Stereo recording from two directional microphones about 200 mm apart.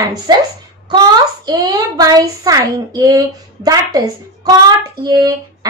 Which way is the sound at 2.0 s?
20° right (ahead or behind).